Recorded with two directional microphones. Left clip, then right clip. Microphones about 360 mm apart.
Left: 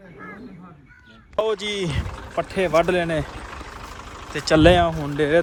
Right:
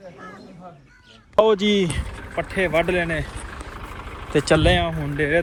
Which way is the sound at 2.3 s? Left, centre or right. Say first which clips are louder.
Left 1 dB; centre.